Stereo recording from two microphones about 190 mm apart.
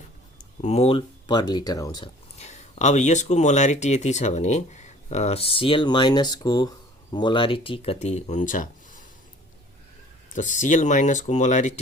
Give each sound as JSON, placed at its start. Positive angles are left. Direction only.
{"t": 0.3, "sound": "speech", "side_deg": 35}
{"t": 2.4, "sound": "speech", "side_deg": 35}
{"t": 10.3, "sound": "speech", "side_deg": 40}